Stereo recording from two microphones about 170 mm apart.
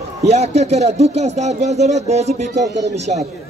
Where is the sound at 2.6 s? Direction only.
20° right (ahead or behind).